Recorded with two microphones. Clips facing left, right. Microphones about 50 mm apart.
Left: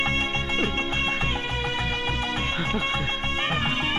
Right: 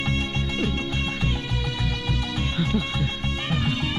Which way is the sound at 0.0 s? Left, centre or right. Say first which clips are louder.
Left 2 dB; left.